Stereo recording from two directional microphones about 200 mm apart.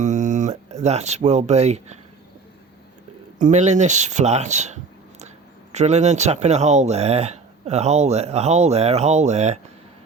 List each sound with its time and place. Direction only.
0.0 s speech: 35° right (ahead or behind)
3.4 s speech: 35° right (ahead or behind)